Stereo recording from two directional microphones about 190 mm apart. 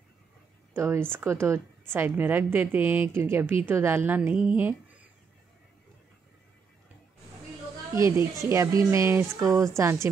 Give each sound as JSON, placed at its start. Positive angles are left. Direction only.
{"t": 0.7, "sound": "a woman's voice", "side_deg": -10}
{"t": 8.0, "sound": "a woman's voice", "side_deg": -15}